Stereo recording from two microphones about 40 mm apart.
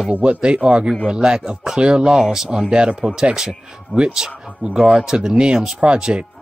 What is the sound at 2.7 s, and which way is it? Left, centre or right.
Speech, right.